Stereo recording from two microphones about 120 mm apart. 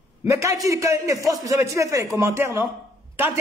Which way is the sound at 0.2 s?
25° right (ahead or behind).